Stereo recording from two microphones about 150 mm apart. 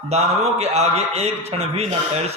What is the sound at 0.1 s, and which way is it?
A man's voice, 45° right (ahead or behind).